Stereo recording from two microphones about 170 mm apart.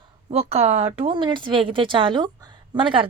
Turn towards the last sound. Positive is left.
turn(degrees=-30)  # may be behind; listen again after turning